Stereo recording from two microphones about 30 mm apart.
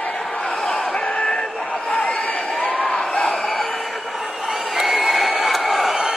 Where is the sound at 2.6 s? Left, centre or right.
Left.